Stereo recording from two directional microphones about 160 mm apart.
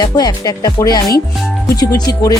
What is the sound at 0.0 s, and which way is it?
Music, 25° left (ahead or behind).